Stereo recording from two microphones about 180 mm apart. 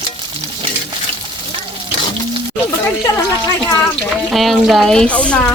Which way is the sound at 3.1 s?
25° left (ahead or behind).